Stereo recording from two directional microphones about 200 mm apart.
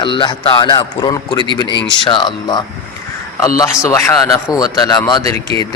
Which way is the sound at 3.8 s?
15° left (ahead or behind).